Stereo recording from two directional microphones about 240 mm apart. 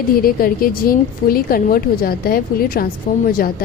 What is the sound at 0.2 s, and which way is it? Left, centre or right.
A woman's voice, left.